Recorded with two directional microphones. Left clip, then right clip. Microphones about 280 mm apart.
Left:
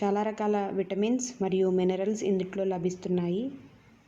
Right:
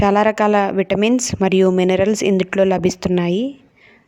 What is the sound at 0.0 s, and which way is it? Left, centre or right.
A woman's voice, right.